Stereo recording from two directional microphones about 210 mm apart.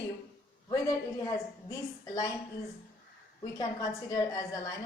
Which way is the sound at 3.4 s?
15° left (ahead or behind).